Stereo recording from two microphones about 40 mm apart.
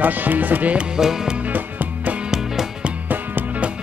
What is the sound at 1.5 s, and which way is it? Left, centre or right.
Music, right.